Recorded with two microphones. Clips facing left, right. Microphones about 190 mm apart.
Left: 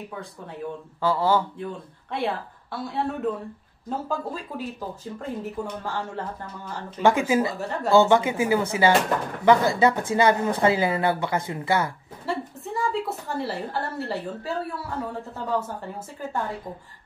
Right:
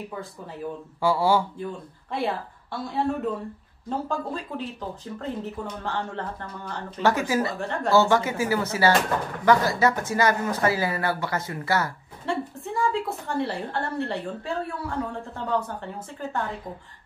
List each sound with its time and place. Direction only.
0.1 s a woman's voice: centre (ahead or behind)
2.1 s a woman's voice: centre (ahead or behind); by 7.5 s 20° left (ahead or behind)
7.6 s a woman's voice: 5° left (ahead or behind)
7.9 s speech: 15° left (ahead or behind)
12.3 s a woman's voice: centre (ahead or behind)